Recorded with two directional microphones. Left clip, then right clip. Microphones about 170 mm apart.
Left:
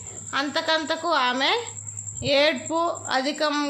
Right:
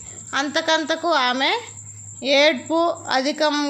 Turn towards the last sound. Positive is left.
turn(degrees=-25)  # may be behind; listen again after turning